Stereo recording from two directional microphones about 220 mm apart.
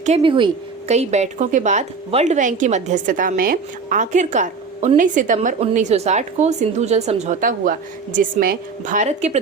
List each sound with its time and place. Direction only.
0.0 s speech: 25° right (ahead or behind)